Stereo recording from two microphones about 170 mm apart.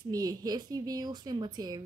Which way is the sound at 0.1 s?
20° right (ahead or behind).